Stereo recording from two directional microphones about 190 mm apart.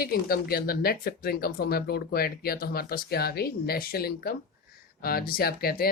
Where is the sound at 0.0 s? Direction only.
55° left (ahead or behind).